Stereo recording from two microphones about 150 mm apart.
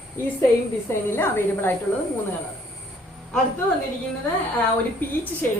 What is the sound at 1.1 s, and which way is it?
Speech, 15° left (ahead or behind).